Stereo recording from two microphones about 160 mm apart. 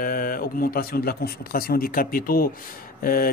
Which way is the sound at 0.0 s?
65° left (ahead or behind).